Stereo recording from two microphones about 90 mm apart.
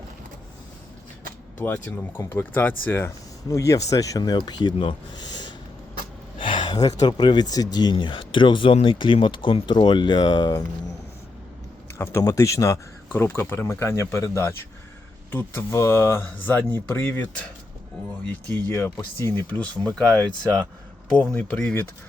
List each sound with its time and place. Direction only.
1.5 s speech: 20° left (ahead or behind)
3.5 s speech: 35° left (ahead or behind); by 5.5 s 55° left (ahead or behind)
6.4 s a sound: 65° left (ahead or behind)
6.8 s speech: 50° left (ahead or behind)
11.9 s speech: 30° left (ahead or behind)
13.1 s speech: 25° left (ahead or behind)
21.3 s speech: 15° left (ahead or behind)